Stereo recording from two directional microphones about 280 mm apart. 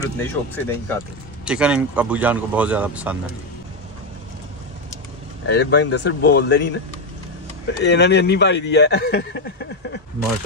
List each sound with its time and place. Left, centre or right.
0.2 s speech: centre
1.4 s speech: centre
5.5 s speech: left